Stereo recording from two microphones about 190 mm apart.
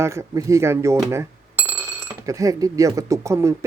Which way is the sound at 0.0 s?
15° right (ahead or behind).